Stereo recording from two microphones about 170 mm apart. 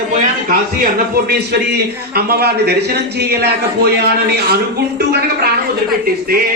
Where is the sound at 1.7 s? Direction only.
65° right (ahead or behind).